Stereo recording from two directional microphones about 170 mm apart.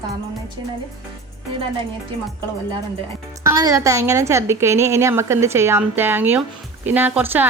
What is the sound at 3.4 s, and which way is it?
A woman's voice, 20° right (ahead or behind).